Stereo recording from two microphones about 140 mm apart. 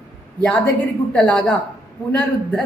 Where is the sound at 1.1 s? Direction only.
5° left (ahead or behind).